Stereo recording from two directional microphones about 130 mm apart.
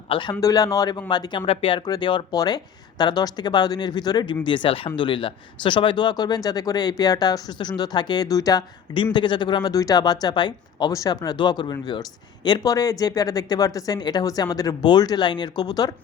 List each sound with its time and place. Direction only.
0.1 s speech: 40° left (ahead or behind)
0.3 s speech: 30° left (ahead or behind)